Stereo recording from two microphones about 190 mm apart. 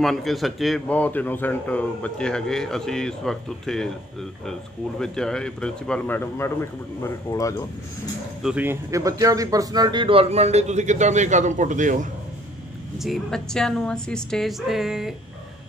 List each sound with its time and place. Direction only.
0.0 s a man's voice: centre (ahead or behind); by 7.6 s 15° left (ahead or behind)
8.4 s a man's voice: 5° right (ahead or behind); by 12.1 s 40° right (ahead or behind)
13.0 s a man's voice: centre (ahead or behind)